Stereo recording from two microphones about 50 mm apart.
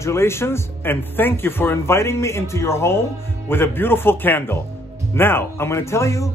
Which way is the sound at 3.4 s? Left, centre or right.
Left.